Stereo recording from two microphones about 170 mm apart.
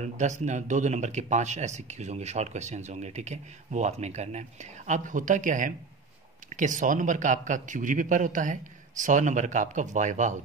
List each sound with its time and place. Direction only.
0.0 s speech: 45° right (ahead or behind)